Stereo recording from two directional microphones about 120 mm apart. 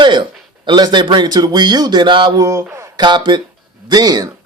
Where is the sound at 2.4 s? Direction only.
30° right (ahead or behind).